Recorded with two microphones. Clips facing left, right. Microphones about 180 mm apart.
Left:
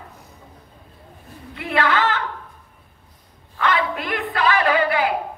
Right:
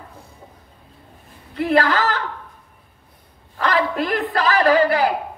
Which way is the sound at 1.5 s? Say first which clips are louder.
Right 4 dB; 40° right (ahead or behind).